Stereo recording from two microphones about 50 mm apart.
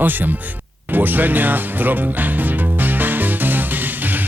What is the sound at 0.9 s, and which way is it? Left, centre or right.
Music, right.